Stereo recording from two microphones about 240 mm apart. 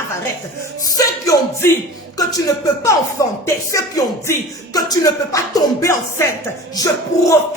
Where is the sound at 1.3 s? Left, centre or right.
Centre.